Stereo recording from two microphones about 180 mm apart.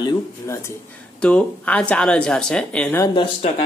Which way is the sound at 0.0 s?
20° left (ahead or behind).